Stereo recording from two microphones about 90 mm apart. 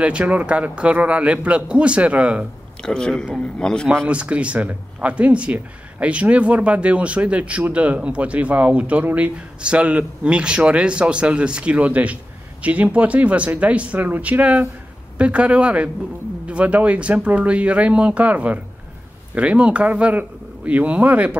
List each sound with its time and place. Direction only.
0.0 s speech: 15° right (ahead or behind)
2.8 s a man's voice: 10° left (ahead or behind)
4.1 s speech: 15° right (ahead or behind)